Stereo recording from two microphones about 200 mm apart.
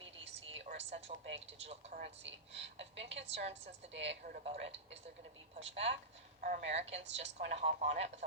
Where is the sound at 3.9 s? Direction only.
60° right (ahead or behind).